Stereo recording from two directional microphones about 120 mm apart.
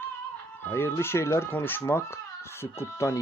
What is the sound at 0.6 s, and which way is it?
Speech, 20° left (ahead or behind).